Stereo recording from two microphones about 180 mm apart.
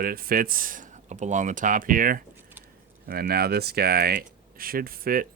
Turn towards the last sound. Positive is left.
turn(degrees=-55)  # may be behind; listen again after turning